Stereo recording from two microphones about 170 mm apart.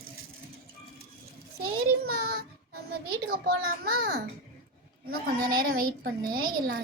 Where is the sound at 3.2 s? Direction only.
65° right (ahead or behind).